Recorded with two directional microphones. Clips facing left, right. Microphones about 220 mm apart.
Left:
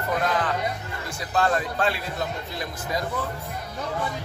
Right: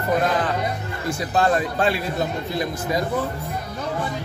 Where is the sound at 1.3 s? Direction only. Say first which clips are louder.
Right 3 dB; 20° right (ahead or behind).